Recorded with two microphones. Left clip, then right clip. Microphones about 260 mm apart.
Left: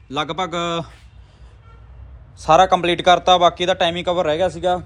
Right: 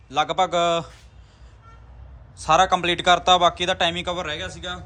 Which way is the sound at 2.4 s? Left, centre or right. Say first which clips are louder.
Left 4 dB; centre.